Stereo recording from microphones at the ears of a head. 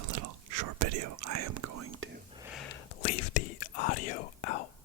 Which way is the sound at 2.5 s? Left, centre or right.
Left.